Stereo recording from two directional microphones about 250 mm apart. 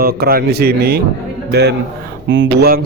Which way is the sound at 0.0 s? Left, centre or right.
Right.